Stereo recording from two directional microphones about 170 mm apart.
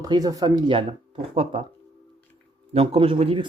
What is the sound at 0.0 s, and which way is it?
Speech, 20° right (ahead or behind).